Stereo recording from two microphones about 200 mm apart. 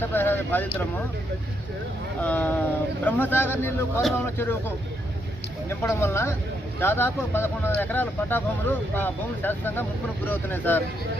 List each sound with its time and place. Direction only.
0.0 s speech: 10° left (ahead or behind)
2.2 s speech: 10° left (ahead or behind)